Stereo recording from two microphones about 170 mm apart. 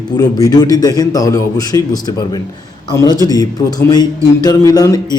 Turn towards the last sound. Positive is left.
turn(degrees=20)  # may be behind; listen again after turning